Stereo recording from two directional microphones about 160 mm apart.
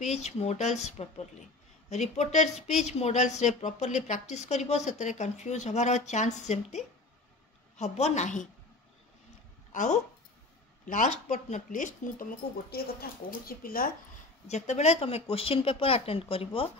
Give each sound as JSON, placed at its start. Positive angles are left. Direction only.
{"t": 0.0, "sound": "a woman's voice", "side_deg": 45}
{"t": 9.7, "sound": "a sound", "side_deg": 50}
{"t": 10.9, "sound": "a woman's voice", "side_deg": 55}
{"t": 12.6, "sound": "speech", "side_deg": 70}
{"t": 14.5, "sound": "speech", "side_deg": 45}